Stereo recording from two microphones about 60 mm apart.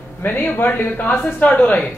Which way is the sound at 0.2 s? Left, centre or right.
Left.